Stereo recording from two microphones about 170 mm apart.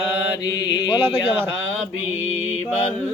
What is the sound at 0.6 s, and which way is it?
Speech, 25° left (ahead or behind).